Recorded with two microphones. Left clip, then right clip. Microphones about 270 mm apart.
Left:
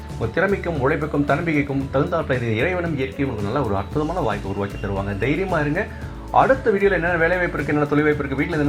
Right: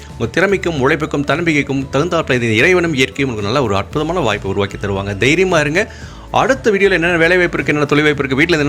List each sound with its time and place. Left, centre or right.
0.3 s speech: right